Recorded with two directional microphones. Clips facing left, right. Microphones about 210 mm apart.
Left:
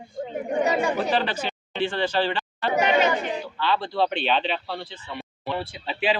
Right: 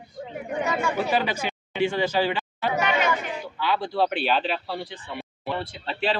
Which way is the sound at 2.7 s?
30° left (ahead or behind).